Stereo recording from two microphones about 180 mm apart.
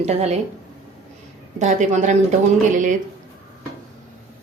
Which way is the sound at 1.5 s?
45° right (ahead or behind).